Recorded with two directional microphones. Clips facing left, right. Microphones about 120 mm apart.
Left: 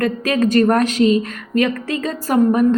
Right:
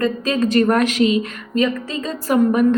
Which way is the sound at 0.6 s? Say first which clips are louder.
Even; 40° left (ahead or behind).